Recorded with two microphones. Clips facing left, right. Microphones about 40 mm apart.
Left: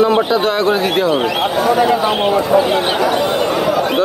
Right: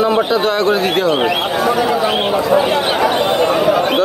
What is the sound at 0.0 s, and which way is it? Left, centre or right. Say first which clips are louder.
A man's voice: left 1 dB; centre.